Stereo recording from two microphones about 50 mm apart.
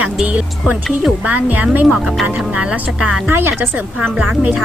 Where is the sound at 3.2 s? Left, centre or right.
Right.